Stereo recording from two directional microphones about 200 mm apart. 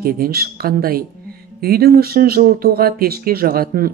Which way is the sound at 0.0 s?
50° right (ahead or behind).